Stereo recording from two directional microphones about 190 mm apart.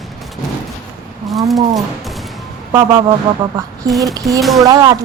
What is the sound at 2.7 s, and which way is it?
A woman's voice, 20° right (ahead or behind).